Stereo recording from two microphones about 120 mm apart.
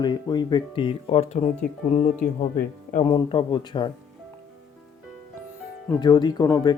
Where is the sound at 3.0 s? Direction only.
40° left (ahead or behind).